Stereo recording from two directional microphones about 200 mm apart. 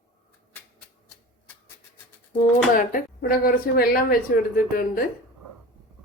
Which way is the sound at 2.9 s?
45° left (ahead or behind).